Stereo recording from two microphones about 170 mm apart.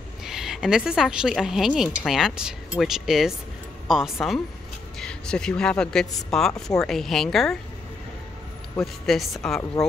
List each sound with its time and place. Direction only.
0.2 s a woman's voice: 5° right (ahead or behind)
8.7 s a woman's voice: centre (ahead or behind)